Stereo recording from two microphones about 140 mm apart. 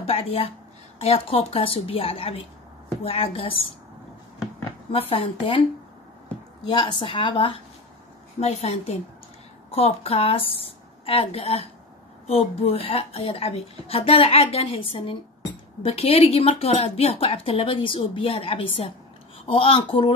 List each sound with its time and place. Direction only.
0.0 s a woman's voice: 45° left (ahead or behind)
4.9 s a woman's voice: 40° left (ahead or behind)
6.7 s a woman's voice: 35° left (ahead or behind)
8.4 s a woman's voice: 50° left (ahead or behind)